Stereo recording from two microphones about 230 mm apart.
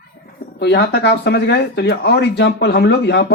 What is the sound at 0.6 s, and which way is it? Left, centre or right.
Speech, left.